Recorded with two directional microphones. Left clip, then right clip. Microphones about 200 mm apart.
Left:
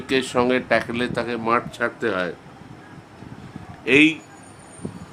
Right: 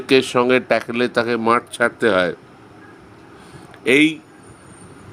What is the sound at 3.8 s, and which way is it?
Speech, 30° right (ahead or behind).